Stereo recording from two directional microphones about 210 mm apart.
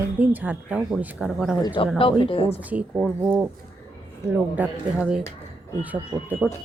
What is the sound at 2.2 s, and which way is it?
Speech, 25° left (ahead or behind).